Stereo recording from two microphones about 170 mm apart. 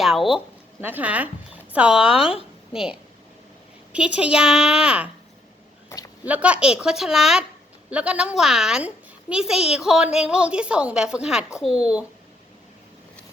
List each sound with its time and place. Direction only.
0.0 s a child's voice: centre (ahead or behind)
5.9 s a sound: 15° left (ahead or behind)
6.2 s a child's voice: 10° right (ahead or behind)